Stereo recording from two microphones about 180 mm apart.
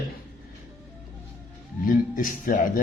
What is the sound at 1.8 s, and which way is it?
Speech, 50° left (ahead or behind).